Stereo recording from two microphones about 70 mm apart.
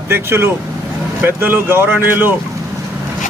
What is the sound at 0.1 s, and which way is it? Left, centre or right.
Speech, right.